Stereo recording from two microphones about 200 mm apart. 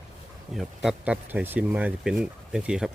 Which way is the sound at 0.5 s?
Centre (ahead or behind).